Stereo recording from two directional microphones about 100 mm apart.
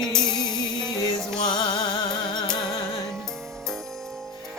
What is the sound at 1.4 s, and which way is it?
Music, 50° left (ahead or behind).